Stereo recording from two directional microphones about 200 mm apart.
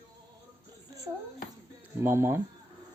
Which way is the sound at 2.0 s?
10° right (ahead or behind).